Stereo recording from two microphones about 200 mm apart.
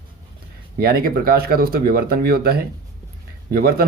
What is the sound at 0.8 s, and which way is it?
Speech, 50° right (ahead or behind).